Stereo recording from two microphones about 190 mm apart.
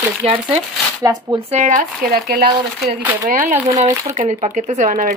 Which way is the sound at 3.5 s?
15° right (ahead or behind).